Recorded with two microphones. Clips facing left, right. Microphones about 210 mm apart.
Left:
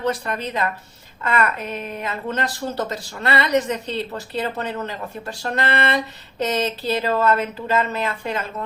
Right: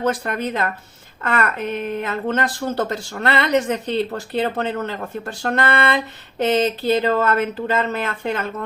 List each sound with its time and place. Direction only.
0.3 s a woman's voice: 50° right (ahead or behind)